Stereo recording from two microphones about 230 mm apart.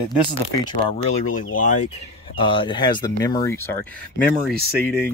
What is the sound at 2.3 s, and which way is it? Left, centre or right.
Speech, left.